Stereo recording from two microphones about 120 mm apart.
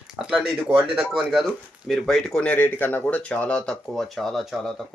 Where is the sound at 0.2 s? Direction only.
5° right (ahead or behind).